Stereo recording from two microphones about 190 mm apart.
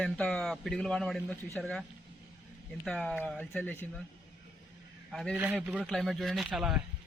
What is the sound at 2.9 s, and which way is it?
Speech, 5° left (ahead or behind).